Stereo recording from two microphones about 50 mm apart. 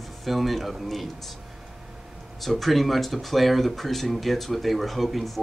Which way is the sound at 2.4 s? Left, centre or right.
Centre.